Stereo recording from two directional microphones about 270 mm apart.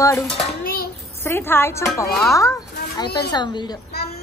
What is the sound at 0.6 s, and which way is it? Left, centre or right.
Child singing, left.